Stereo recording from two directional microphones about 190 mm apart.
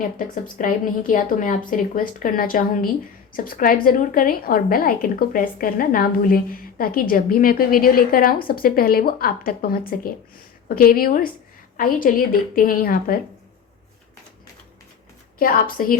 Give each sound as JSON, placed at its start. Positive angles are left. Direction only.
{"t": 0.6, "sound": "a woman's voice", "side_deg": 45}
{"t": 15.4, "sound": "a woman's voice", "side_deg": 50}